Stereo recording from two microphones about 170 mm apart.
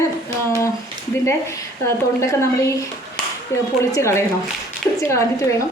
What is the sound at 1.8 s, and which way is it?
Speech, 15° left (ahead or behind).